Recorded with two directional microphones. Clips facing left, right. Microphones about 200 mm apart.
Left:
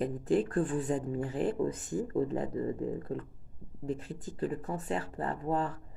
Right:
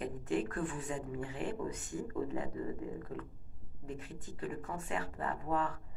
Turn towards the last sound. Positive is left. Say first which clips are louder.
# left 4 dB
turn(degrees=30)  # may be behind; listen again after turning